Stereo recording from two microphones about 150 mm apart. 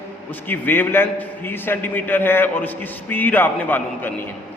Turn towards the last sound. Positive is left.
turn(degrees=10)  # may be behind; listen again after turning